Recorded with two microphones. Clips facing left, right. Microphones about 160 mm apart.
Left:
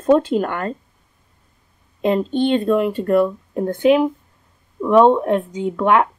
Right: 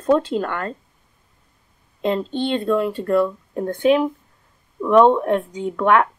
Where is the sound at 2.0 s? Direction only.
15° left (ahead or behind).